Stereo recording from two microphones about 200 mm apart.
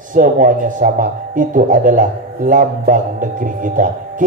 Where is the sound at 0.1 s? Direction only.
40° right (ahead or behind).